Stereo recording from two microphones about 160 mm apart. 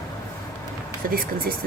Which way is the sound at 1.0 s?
60° right (ahead or behind).